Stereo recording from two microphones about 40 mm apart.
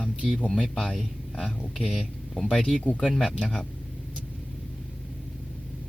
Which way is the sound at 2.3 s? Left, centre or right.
Centre.